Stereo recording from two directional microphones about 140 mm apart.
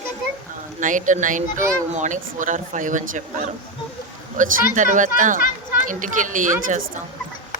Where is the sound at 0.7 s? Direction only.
65° right (ahead or behind).